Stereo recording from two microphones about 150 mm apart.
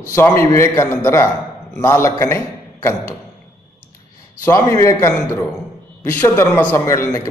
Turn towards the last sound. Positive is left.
turn(degrees=20)  # may be behind; listen again after turning